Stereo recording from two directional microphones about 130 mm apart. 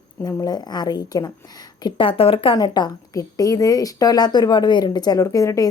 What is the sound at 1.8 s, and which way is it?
Speech, 40° left (ahead or behind).